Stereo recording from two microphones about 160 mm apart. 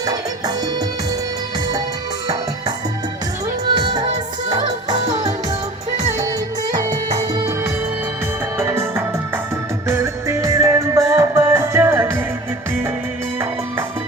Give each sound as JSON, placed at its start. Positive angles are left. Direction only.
{"t": 0.0, "sound": "music", "side_deg": -25}
{"t": 6.9, "sound": "music", "side_deg": -25}